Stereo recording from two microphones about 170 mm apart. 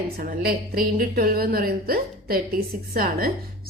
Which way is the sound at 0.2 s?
60° right (ahead or behind).